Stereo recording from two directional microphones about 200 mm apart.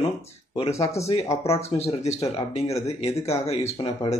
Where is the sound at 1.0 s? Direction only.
30° left (ahead or behind).